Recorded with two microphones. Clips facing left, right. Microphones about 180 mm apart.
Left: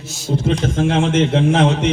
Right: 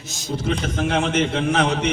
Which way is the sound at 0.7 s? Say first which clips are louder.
Left 4 dB; 25° left (ahead or behind).